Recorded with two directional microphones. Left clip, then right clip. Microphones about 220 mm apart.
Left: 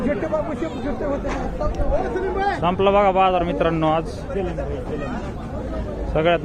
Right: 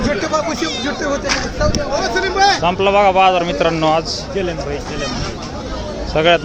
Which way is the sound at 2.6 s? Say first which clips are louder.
Right 4 dB; 5° right (ahead or behind).